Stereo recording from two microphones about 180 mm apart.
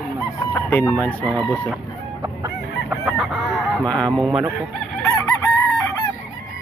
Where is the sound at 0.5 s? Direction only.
10° left (ahead or behind).